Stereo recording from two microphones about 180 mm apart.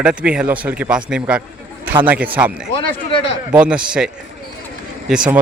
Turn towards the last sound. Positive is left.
turn(degrees=-5)  # may be behind; listen again after turning